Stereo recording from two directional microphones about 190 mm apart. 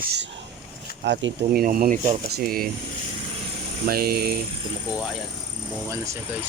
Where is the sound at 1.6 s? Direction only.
45° right (ahead or behind).